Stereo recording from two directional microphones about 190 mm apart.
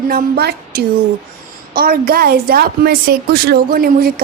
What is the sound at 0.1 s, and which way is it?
A woman's voice, 55° right (ahead or behind).